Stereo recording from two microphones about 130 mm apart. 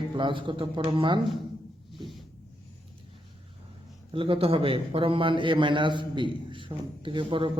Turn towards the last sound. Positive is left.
turn(degrees=-40)  # may be behind; listen again after turning